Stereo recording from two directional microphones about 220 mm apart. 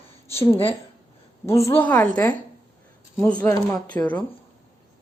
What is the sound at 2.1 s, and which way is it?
Speech, 15° left (ahead or behind).